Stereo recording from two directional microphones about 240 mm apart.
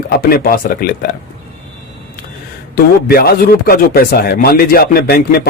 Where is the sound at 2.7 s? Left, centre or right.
Left.